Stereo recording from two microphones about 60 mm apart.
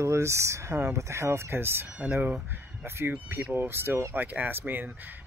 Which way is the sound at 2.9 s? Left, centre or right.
Right.